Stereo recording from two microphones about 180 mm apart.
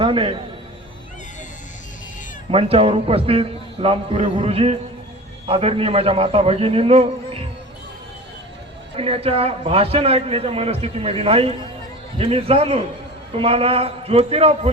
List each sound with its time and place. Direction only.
0.0 s a man's voice: 30° right (ahead or behind)
2.5 s a man's voice: 30° right (ahead or behind)
9.0 s a man's voice: 30° right (ahead or behind)